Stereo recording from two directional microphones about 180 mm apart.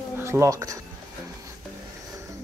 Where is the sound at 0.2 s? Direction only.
15° right (ahead or behind).